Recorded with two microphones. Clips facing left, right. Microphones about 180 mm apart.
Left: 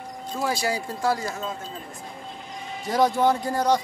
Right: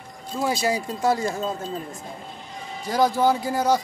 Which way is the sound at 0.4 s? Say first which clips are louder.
Right 3 dB; 20° right (ahead or behind).